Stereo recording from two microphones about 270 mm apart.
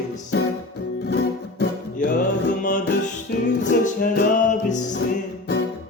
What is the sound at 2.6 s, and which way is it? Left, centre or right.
Music, left.